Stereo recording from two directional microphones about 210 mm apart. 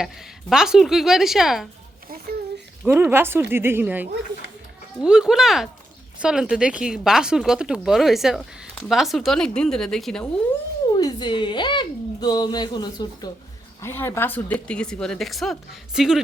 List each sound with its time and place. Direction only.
0.5 s speech: 5° right (ahead or behind)
2.8 s speech: 10° right (ahead or behind)
10.9 s a woman's voice: 20° left (ahead or behind); by 16.2 s centre (ahead or behind)